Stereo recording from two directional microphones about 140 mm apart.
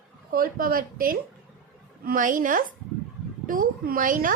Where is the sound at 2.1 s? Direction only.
70° right (ahead or behind).